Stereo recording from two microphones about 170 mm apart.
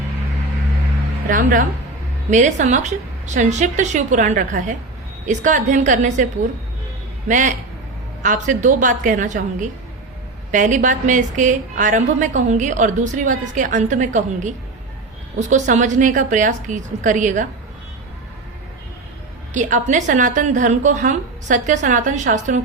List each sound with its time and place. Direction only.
1.3 s a woman's voice: 55° right (ahead or behind)
7.3 s a woman's voice: 50° right (ahead or behind)
19.5 s a woman's voice: 45° right (ahead or behind)